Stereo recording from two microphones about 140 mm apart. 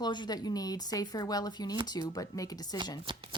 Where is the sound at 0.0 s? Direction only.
30° left (ahead or behind).